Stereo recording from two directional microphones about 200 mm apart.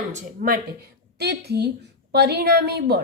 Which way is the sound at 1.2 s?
55° right (ahead or behind).